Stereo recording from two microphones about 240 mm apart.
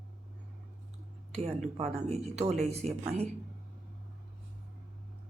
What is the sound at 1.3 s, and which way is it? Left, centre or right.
A woman's voice, right.